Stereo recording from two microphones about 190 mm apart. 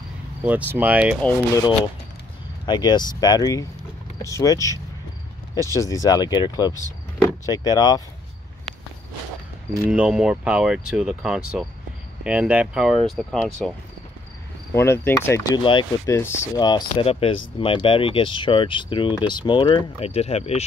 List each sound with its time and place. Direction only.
0.4 s speech: 10° right (ahead or behind)
1.2 s speech: 20° left (ahead or behind)
9.8 s speech: 5° right (ahead or behind)
14.7 s speech: 15° left (ahead or behind)
16.2 s speech: 15° left (ahead or behind); by 20.6 s 35° left (ahead or behind)